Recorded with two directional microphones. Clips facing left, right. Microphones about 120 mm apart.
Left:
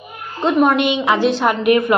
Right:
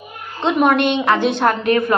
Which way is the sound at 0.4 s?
5° left (ahead or behind).